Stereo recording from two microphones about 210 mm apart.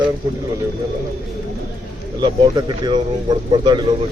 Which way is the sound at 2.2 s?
20° right (ahead or behind).